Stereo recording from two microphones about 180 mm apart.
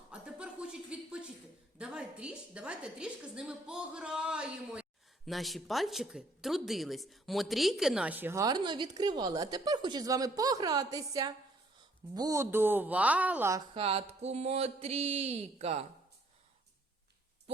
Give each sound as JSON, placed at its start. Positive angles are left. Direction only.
{"t": 0.1, "sound": "chuckle", "side_deg": -5}
{"t": 1.8, "sound": "a woman's voice", "side_deg": -5}
{"t": 13.7, "sound": "speech", "side_deg": -35}